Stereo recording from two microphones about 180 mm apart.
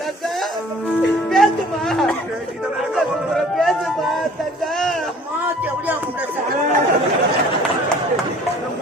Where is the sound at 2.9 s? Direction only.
Centre (ahead or behind).